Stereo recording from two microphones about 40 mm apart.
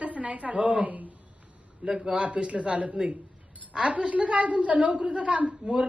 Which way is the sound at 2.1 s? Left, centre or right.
Right.